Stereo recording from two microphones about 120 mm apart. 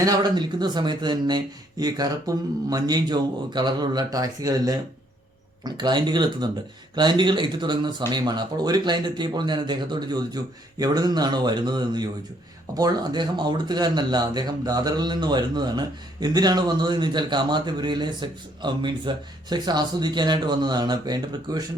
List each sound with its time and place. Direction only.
0.0 s speech: 35° right (ahead or behind)